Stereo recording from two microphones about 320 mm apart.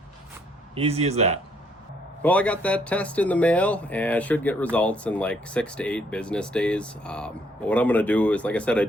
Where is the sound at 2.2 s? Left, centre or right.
Centre.